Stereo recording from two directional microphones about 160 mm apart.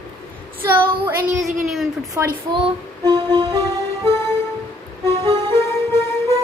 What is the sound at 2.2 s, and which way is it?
Speech, 15° right (ahead or behind).